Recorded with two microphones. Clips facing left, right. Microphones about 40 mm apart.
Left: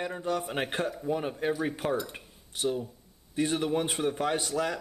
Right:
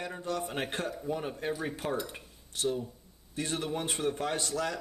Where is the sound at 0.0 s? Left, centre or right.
Centre.